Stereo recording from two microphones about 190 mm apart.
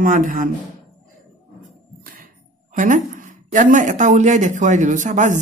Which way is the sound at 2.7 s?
40° right (ahead or behind).